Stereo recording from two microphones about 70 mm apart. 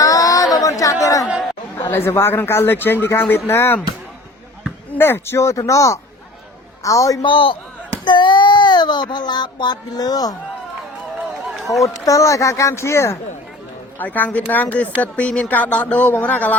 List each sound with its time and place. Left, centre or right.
0.0 s chatter: left
1.3 s chatter: centre
1.7 s a man's voice: left
4.9 s speech: left
8.0 s speech: left
11.7 s speech: left
14.0 s speech: left